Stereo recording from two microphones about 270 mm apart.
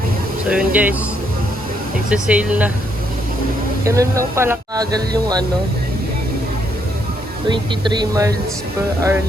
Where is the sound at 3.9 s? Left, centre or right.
Centre.